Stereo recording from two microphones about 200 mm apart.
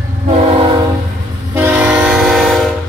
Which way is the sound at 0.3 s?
30° right (ahead or behind).